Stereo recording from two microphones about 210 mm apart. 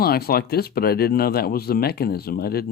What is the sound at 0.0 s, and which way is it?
Speech, 45° left (ahead or behind).